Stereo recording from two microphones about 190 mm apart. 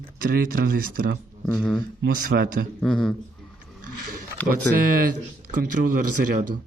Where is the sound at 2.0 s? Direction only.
50° right (ahead or behind).